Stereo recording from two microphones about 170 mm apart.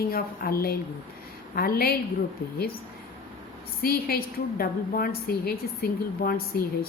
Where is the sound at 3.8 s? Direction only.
60° left (ahead or behind).